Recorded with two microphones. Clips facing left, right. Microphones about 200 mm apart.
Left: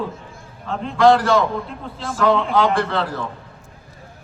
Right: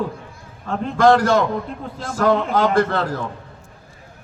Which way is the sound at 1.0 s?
45° right (ahead or behind).